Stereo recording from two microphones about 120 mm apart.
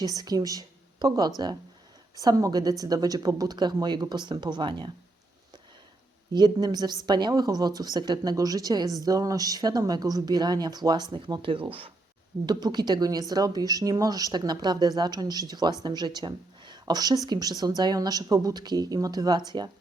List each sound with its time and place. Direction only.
0.0 s speech: 30° right (ahead or behind)
6.3 s speech: 35° right (ahead or behind)
12.5 s speech: 35° right (ahead or behind)